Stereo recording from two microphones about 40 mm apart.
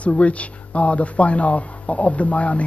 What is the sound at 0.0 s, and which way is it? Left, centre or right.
Speech, left.